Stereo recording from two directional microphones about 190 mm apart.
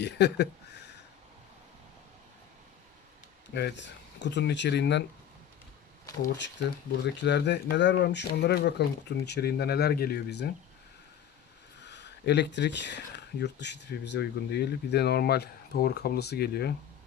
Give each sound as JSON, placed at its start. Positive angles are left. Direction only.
{"t": 0.0, "sound": "a sound", "side_deg": 65}
{"t": 3.5, "sound": "speech", "side_deg": 65}
{"t": 6.3, "sound": "speech", "side_deg": 70}
{"t": 11.8, "sound": "speech", "side_deg": 65}